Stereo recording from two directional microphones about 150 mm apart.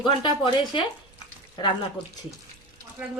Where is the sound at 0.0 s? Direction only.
35° left (ahead or behind).